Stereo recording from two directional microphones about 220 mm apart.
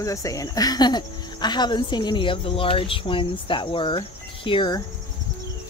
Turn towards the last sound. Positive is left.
turn(degrees=20)  # may be behind; listen again after turning